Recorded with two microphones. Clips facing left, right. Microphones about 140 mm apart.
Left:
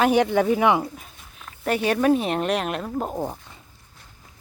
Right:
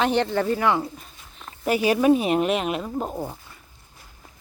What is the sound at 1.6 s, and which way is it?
Speech, 5° right (ahead or behind).